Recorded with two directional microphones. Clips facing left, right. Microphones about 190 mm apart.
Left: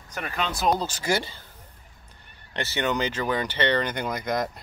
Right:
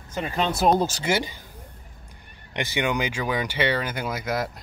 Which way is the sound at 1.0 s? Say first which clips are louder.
Right 1 dB; 15° right (ahead or behind).